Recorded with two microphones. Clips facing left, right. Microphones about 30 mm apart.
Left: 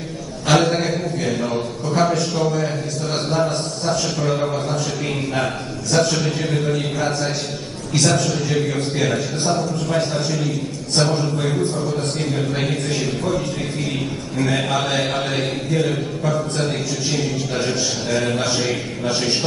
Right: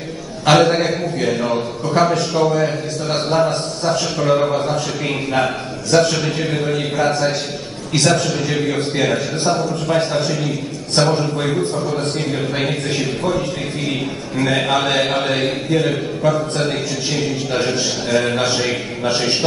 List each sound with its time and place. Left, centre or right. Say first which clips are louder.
0.5 s a man's voice: right 3 dB; centre